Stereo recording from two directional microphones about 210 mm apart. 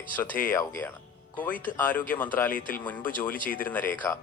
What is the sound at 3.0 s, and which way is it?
Speech, 40° left (ahead or behind).